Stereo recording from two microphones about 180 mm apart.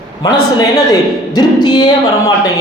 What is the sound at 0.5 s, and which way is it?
Speech, 20° left (ahead or behind).